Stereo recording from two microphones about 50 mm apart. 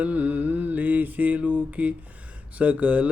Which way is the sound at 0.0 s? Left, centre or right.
Right.